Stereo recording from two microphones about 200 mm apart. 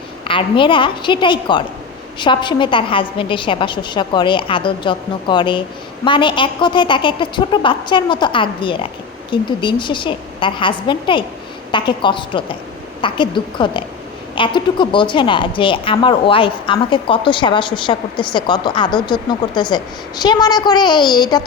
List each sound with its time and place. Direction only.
0.3 s a woman's voice: 25° left (ahead or behind)